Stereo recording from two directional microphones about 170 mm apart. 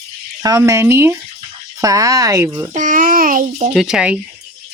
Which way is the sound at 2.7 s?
50° right (ahead or behind).